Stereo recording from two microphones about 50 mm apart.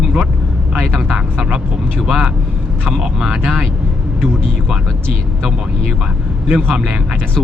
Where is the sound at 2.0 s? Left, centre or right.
Centre.